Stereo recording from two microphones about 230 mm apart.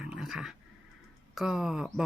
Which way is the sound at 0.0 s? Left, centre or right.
Centre.